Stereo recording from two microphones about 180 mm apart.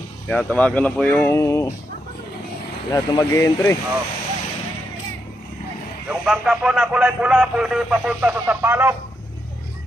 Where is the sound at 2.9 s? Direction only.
20° left (ahead or behind).